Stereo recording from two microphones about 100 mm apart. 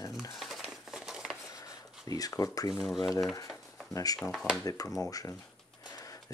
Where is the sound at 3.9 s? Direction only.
35° left (ahead or behind).